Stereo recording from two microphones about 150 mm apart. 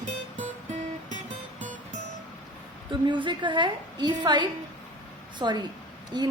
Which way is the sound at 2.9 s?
30° right (ahead or behind).